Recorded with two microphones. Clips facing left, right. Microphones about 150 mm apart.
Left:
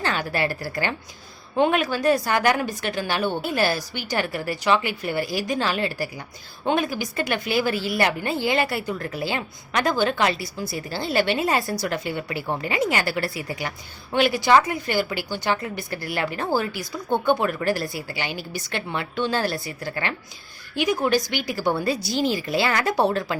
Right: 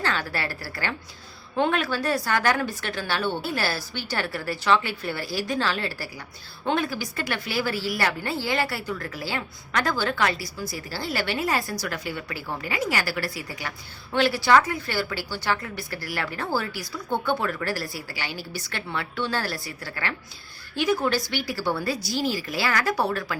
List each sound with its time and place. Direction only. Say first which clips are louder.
0.0 s a woman's voice: left 3 dB; 20° left (ahead or behind)